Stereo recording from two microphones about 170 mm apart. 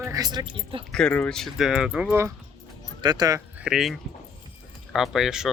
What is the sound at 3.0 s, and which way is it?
Speech, 25° right (ahead or behind).